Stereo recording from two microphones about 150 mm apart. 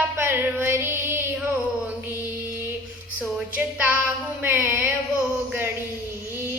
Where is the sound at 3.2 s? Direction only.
5° right (ahead or behind).